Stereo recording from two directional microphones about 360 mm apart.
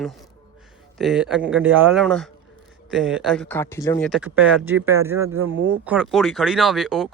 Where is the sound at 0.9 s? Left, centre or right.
Centre.